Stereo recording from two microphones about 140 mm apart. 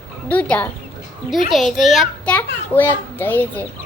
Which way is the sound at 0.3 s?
10° left (ahead or behind).